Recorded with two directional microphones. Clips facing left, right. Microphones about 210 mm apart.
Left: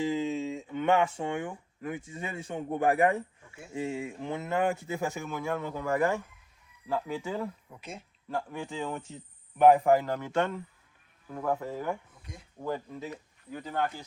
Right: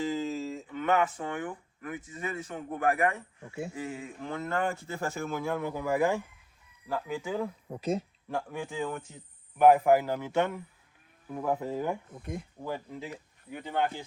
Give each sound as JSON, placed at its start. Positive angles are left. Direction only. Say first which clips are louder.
{"t": 0.1, "sound": "a sound", "louder": "left 2 dB", "side_deg": 0}
{"t": 0.7, "sound": "speech", "louder": "left 2 dB", "side_deg": 25}
{"t": 4.5, "sound": "speech", "louder": "left 4 dB", "side_deg": 5}
{"t": 5.1, "sound": "a man's voice", "louder": "right 1 dB", "side_deg": -5}
{"t": 7.7, "sound": "speech", "louder": "right 13 dB", "side_deg": -40}
{"t": 8.7, "sound": "a man's voice", "louder": "even", "side_deg": -5}
{"t": 12.2, "sound": "speech", "louder": "right 11 dB", "side_deg": -55}
{"t": 12.6, "sound": "a man's voice", "louder": "left 4 dB", "side_deg": -10}
{"t": 13.5, "sound": "speech", "louder": "right 1 dB", "side_deg": -25}